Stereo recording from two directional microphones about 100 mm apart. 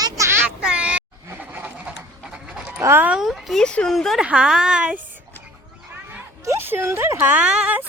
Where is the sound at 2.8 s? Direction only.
25° right (ahead or behind).